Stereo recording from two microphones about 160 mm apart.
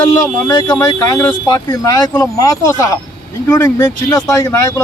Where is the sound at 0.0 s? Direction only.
15° left (ahead or behind).